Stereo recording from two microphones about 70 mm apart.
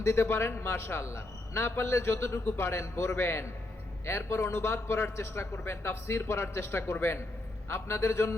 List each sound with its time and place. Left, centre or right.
0.0 s a man's voice: left